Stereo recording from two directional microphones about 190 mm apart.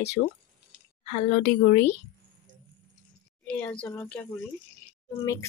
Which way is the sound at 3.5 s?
10° left (ahead or behind).